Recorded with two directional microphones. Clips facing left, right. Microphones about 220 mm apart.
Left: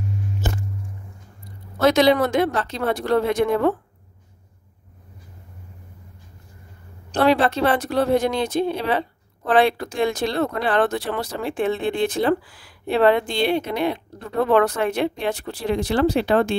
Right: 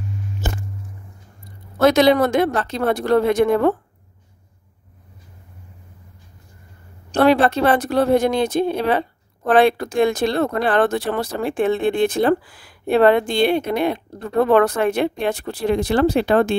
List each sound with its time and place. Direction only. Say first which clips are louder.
1.8 s speech: right 2 dB; 50° right (ahead or behind)
7.1 s speech: right 3 dB; 50° right (ahead or behind)